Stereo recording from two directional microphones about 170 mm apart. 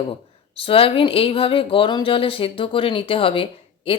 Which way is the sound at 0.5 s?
35° left (ahead or behind).